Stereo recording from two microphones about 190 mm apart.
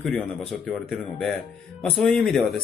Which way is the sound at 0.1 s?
5° left (ahead or behind).